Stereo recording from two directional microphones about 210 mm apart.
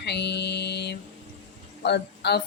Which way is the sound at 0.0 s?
55° left (ahead or behind).